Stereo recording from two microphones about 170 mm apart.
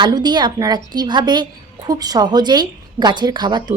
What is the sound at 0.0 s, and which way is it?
A woman's voice, 25° right (ahead or behind).